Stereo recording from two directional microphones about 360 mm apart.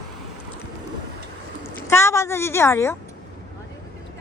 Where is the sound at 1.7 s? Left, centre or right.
Centre.